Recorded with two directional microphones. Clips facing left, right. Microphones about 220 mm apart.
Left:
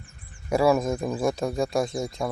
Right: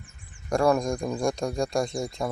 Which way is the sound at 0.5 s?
5° left (ahead or behind).